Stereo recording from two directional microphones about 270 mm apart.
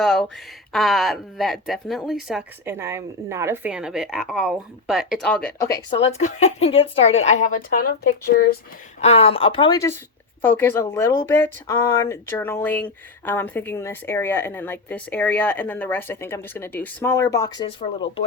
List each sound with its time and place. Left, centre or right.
0.0 s speech: centre
5.7 s speech: centre
9.0 s speech: left